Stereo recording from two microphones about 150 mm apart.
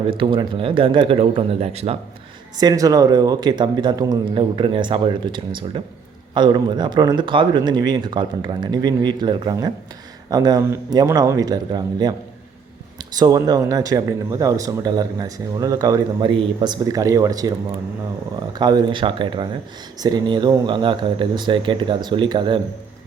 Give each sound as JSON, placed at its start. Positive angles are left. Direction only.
{"t": 0.1, "sound": "a man's voice", "side_deg": -35}
{"t": 2.6, "sound": "a man's voice", "side_deg": -25}
{"t": 13.1, "sound": "speech", "side_deg": -25}
{"t": 18.5, "sound": "a man's voice", "side_deg": -30}